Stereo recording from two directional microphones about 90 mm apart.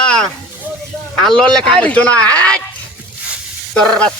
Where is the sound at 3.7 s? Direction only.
10° left (ahead or behind).